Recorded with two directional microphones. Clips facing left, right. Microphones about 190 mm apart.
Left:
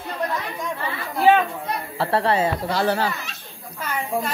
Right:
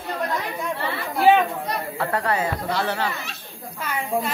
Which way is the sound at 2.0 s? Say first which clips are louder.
Left 4 dB; 30° left (ahead or behind).